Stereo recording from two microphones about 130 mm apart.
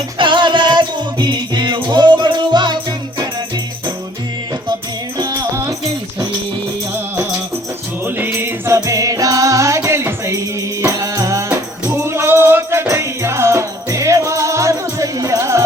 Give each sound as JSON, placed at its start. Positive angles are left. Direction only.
{"t": 0.2, "sound": "music", "side_deg": -40}
{"t": 5.1, "sound": "music", "side_deg": -30}
{"t": 8.0, "sound": "music", "side_deg": -15}